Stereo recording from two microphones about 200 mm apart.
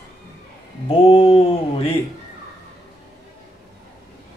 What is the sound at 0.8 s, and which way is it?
Mantra, 30° left (ahead or behind).